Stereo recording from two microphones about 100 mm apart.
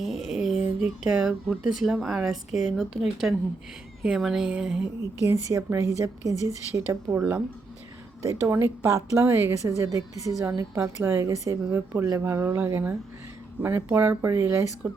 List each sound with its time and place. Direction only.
0.0 s a sound: centre (ahead or behind)
0.8 s speech: 5° right (ahead or behind)
5.2 s a woman's voice: 30° right (ahead or behind)